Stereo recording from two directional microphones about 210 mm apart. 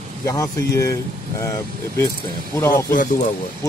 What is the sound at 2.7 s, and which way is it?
Speech, 40° left (ahead or behind).